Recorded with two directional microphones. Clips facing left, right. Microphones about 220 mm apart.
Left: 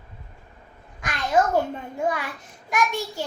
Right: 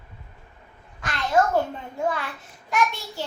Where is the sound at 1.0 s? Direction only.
15° left (ahead or behind).